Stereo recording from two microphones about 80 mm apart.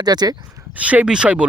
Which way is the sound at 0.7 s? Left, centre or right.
Centre.